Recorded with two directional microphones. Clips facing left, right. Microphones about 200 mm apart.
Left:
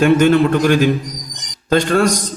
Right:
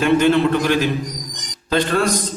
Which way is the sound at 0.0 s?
45° left (ahead or behind).